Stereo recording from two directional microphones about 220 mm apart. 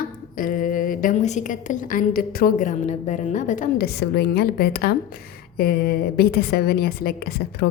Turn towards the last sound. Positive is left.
turn(degrees=45)  # may be behind; listen again after turning